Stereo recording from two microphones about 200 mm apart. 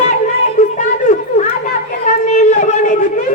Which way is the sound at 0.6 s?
40° left (ahead or behind).